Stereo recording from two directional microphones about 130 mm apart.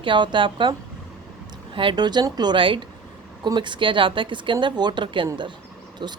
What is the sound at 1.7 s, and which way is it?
Speech, 40° right (ahead or behind).